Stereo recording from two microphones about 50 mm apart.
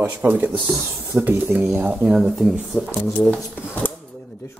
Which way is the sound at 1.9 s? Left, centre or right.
Centre.